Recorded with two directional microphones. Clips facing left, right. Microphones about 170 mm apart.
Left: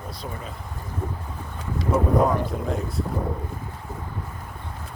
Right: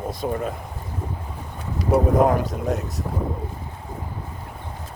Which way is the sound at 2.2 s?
45° right (ahead or behind).